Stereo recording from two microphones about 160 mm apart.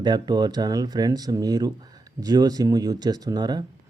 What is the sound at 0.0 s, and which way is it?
Speech, 25° right (ahead or behind).